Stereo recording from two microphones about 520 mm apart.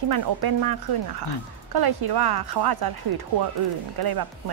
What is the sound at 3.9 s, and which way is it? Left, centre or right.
Speech, right.